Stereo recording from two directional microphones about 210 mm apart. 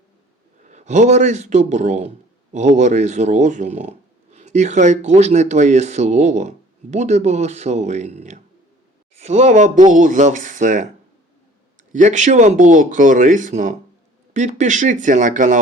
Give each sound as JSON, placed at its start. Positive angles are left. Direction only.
{"t": 0.7, "sound": "a man's voice", "side_deg": -35}
{"t": 11.9, "sound": "a man's voice", "side_deg": -35}